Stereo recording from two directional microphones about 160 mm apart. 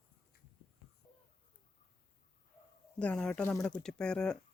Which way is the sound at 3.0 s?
5° left (ahead or behind).